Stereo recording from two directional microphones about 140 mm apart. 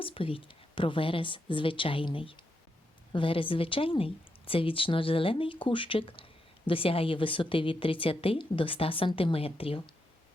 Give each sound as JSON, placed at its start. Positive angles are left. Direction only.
{"t": 0.0, "sound": "a woman's voice", "side_deg": 40}